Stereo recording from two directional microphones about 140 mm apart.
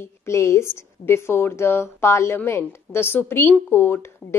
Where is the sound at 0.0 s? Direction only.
20° left (ahead or behind).